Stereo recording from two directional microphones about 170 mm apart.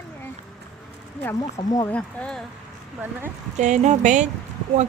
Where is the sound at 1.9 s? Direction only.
5° left (ahead or behind).